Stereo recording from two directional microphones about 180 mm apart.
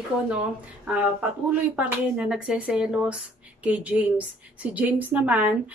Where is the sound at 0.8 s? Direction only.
10° right (ahead or behind).